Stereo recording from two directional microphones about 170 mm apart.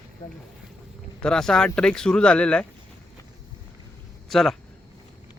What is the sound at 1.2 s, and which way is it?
Speech, 5° left (ahead or behind).